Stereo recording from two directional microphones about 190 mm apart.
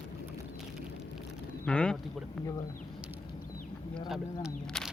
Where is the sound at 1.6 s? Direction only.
5° left (ahead or behind).